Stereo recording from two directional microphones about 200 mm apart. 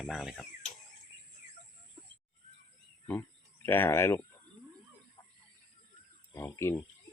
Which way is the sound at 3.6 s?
10° left (ahead or behind).